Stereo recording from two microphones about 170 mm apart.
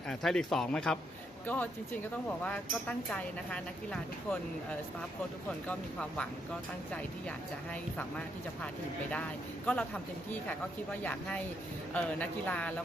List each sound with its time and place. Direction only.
0.1 s speech: 5° left (ahead or behind)
5.6 s speech: 5° left (ahead or behind)
8.6 s speech: 5° left (ahead or behind)
11.0 s speech: 10° left (ahead or behind)